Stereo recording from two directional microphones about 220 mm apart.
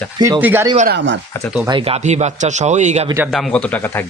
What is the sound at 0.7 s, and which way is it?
Speech, 45° right (ahead or behind).